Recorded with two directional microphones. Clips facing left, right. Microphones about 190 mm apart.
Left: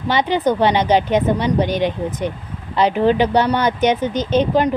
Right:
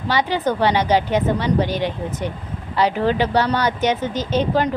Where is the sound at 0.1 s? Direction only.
20° left (ahead or behind).